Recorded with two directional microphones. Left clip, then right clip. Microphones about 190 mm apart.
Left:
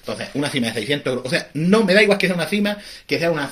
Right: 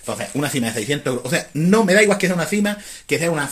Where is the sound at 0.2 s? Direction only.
35° right (ahead or behind).